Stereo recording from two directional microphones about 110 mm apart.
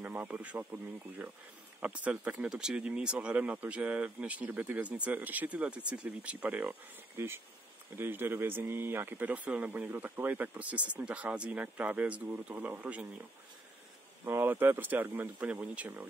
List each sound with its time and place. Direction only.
0.0 s speech: 15° right (ahead or behind)
14.2 s speech: 20° right (ahead or behind)